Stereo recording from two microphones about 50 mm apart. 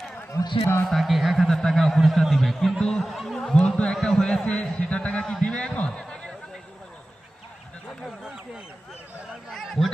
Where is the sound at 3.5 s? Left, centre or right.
Centre.